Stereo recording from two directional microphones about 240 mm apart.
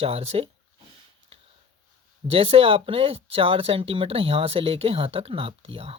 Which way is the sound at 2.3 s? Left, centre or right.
Right.